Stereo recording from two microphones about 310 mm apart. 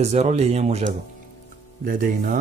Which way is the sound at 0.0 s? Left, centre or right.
Right.